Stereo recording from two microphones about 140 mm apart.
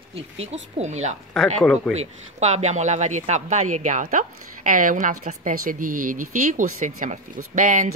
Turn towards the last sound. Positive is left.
turn(degrees=-65)  # may be behind; listen again after turning